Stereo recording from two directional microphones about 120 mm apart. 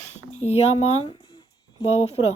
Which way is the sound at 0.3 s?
60° left (ahead or behind).